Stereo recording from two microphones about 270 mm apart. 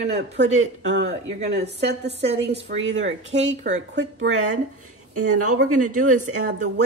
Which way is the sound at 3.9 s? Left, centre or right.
Right.